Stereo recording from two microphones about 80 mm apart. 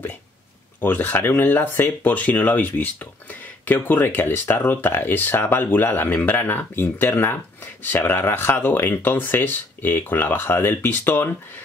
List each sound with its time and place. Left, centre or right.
0.7 s speech: left